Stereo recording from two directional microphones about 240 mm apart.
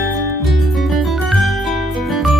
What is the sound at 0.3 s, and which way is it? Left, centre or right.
Music, centre.